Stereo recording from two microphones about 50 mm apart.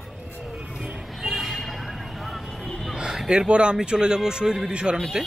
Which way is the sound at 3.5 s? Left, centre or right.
Right.